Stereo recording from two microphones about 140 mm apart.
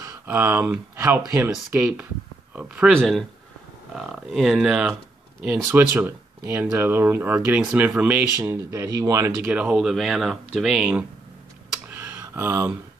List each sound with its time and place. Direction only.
0.0 s speech: 20° right (ahead or behind)
2.9 s speech: 5° left (ahead or behind)
8.5 s speech: 20° right (ahead or behind)
9.5 s speech: 10° right (ahead or behind)
11.9 s a sound: 20° right (ahead or behind)